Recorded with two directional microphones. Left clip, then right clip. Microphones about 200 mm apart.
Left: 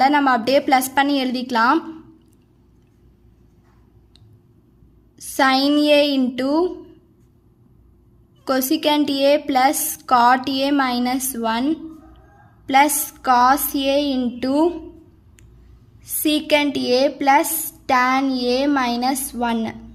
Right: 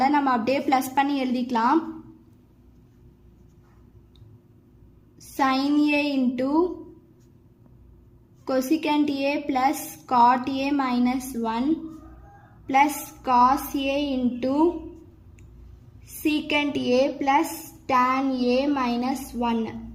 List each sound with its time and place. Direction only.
0.0 s a woman's voice: 25° left (ahead or behind)
5.1 s a woman's voice: 25° left (ahead or behind)
8.4 s a woman's voice: 25° left (ahead or behind)
16.2 s a woman's voice: 30° left (ahead or behind)